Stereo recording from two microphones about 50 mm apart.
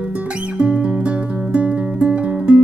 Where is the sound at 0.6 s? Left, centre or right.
Centre.